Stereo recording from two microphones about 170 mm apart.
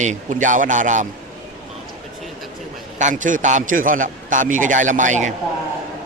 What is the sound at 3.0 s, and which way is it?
Speech, 50° right (ahead or behind).